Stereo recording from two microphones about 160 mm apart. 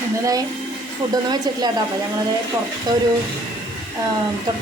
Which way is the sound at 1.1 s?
25° right (ahead or behind).